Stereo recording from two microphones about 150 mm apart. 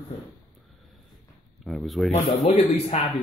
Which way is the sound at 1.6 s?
Centre (ahead or behind).